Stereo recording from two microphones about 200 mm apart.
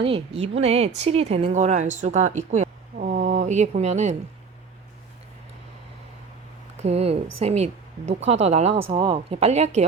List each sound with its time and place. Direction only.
0.0 s speech: 30° right (ahead or behind)
6.8 s speech: 30° right (ahead or behind)